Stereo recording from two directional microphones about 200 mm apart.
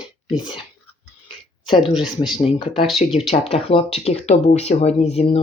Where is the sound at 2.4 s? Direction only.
30° left (ahead or behind).